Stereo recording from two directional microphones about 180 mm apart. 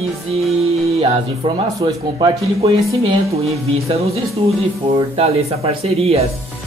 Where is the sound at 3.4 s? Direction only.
35° right (ahead or behind).